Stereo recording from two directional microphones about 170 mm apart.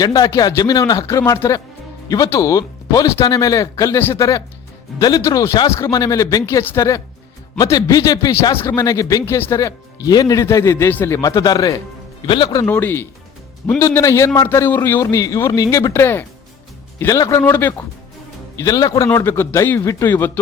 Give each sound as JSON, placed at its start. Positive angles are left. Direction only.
{"t": 0.0, "sound": "a man's voice", "side_deg": 20}
{"t": 12.6, "sound": "a man's voice", "side_deg": 10}